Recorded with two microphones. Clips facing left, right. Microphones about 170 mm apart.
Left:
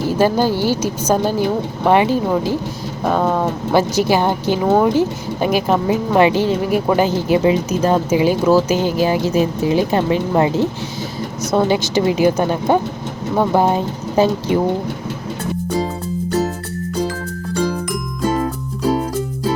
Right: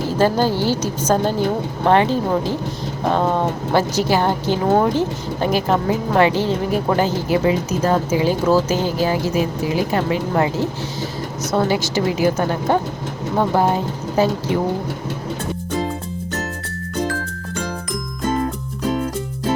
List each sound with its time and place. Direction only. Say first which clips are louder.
0.2 s speech: left 1 dB; 10° left (ahead or behind)
11.5 s speech: left 3 dB; 20° left (ahead or behind)